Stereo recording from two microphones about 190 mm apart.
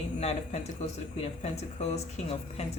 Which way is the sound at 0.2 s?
35° left (ahead or behind).